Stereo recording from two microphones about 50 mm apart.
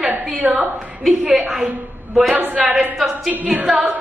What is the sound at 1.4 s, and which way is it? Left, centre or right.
Speech, centre.